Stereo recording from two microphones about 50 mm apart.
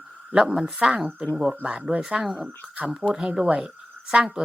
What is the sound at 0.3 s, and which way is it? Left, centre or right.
A woman's voice, centre.